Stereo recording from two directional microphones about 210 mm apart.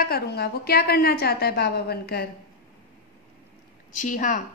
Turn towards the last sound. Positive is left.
turn(degrees=35)  # may be behind; listen again after turning